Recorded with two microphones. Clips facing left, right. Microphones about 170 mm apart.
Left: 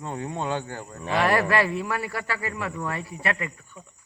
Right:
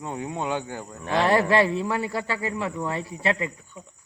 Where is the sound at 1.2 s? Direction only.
25° right (ahead or behind).